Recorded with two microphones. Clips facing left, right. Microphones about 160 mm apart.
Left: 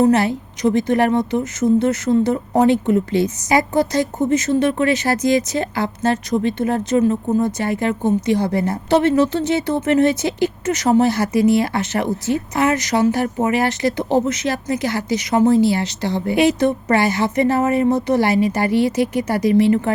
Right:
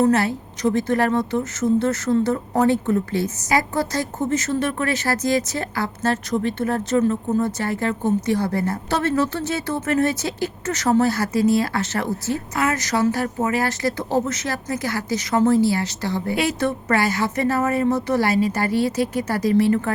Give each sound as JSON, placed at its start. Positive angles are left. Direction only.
{"t": 0.0, "sound": "a woman's voice", "side_deg": 15}